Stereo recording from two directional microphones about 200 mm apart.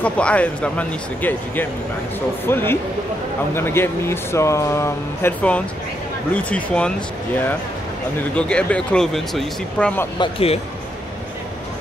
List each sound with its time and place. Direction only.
0.0 s speech: 5° left (ahead or behind)
8.4 s speech: 5° left (ahead or behind)
10.1 s speech: 25° left (ahead or behind)